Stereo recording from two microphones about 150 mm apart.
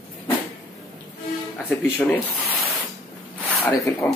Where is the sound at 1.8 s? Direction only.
10° left (ahead or behind).